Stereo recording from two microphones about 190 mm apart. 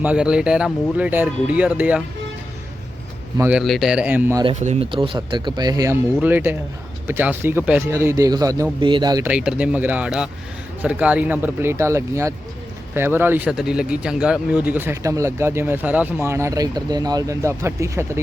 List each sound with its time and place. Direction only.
0.0 s speech: 5° right (ahead or behind)
3.3 s speech: 10° right (ahead or behind)
3.6 s speech: centre (ahead or behind)
4.4 s speech: 30° right (ahead or behind)
9.2 s speech: 5° right (ahead or behind)